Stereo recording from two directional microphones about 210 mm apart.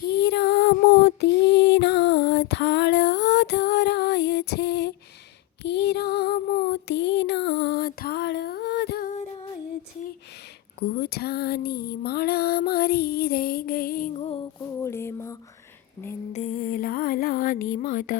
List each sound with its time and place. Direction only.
0.0 s female singing: 50° left (ahead or behind)
5.6 s music: 55° left (ahead or behind)
10.8 s music: 50° left (ahead or behind)
14.2 s music: 25° left (ahead or behind)
14.8 s a sound: 10° left (ahead or behind)
16.3 s music: 35° left (ahead or behind)